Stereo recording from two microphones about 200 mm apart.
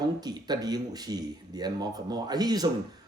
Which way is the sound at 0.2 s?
20° right (ahead or behind).